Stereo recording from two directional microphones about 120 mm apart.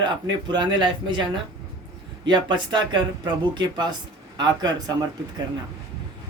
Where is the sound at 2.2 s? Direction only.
40° right (ahead or behind).